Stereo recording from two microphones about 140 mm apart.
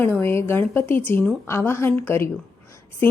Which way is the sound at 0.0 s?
15° left (ahead or behind).